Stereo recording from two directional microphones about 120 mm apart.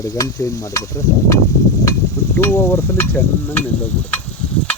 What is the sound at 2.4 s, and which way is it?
Stir, 20° left (ahead or behind).